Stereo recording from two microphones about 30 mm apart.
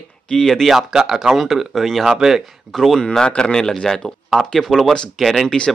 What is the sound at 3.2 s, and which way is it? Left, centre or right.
Speech, left.